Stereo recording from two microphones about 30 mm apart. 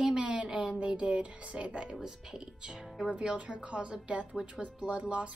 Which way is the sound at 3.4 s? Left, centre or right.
Right.